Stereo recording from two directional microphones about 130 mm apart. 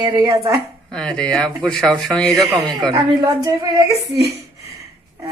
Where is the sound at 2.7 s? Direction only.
25° right (ahead or behind).